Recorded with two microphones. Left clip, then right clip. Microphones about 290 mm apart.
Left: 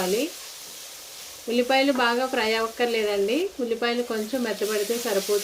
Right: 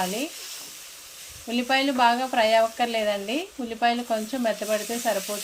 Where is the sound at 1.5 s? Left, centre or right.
Right.